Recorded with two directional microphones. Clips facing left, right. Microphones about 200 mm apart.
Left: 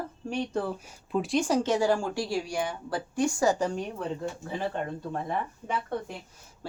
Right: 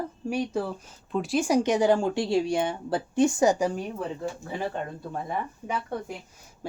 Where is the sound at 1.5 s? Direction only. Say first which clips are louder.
Right 6 dB; 15° right (ahead or behind).